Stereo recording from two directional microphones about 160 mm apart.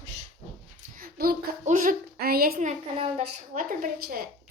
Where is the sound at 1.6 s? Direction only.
50° right (ahead or behind); by 2.6 s 70° right (ahead or behind).